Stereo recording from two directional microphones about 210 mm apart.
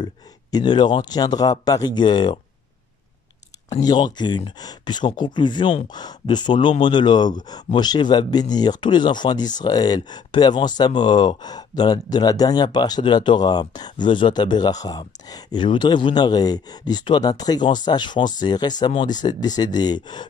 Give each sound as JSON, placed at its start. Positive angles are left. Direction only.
{"t": 0.0, "sound": "speech", "side_deg": 20}
{"t": 3.8, "sound": "speech", "side_deg": 20}